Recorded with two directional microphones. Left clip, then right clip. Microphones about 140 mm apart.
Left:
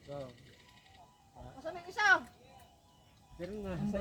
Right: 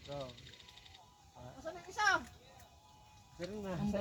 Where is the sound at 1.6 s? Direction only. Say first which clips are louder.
Left 3 dB; 15° left (ahead or behind).